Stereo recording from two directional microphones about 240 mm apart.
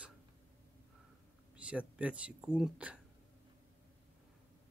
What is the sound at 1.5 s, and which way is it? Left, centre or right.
Speech, centre.